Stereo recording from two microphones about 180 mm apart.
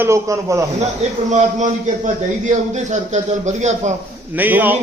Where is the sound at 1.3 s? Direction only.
40° right (ahead or behind).